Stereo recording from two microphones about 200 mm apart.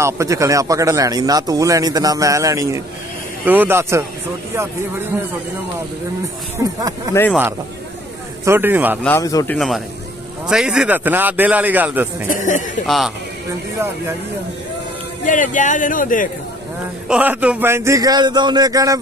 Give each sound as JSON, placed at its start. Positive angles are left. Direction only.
{"t": 0.0, "sound": "speech", "side_deg": -15}
{"t": 6.6, "sound": "speech", "side_deg": -15}
{"t": 8.5, "sound": "speech", "side_deg": -10}
{"t": 9.0, "sound": "speech", "side_deg": 15}
{"t": 10.5, "sound": "speech", "side_deg": -5}
{"t": 12.3, "sound": "speech", "side_deg": 40}
{"t": 12.8, "sound": "a man's voice", "side_deg": 0}
{"t": 15.2, "sound": "speech", "side_deg": 40}
{"t": 17.1, "sound": "speech", "side_deg": -5}